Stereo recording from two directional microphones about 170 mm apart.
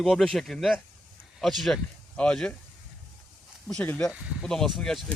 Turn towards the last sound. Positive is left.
turn(degrees=0)  # may be behind; listen again after turning